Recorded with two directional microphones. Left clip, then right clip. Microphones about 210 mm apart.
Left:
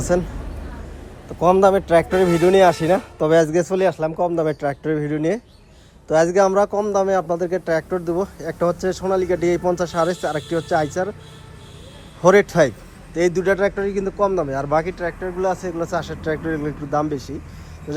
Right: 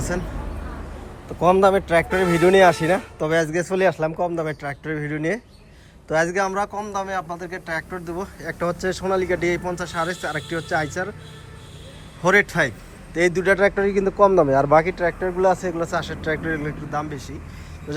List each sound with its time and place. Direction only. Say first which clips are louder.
1.3 s a man's voice: left 2 dB; 15° left (ahead or behind); by 7.4 s 35° left (ahead or behind)
7.8 s speech: left 7 dB; 25° left (ahead or behind)
12.2 s speech: left 4 dB; 25° left (ahead or behind)